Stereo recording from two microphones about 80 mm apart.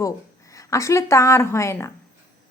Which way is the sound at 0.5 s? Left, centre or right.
Left.